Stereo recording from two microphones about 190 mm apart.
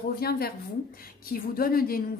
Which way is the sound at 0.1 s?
55° left (ahead or behind).